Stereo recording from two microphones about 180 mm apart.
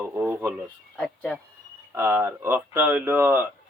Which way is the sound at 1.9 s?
10° right (ahead or behind).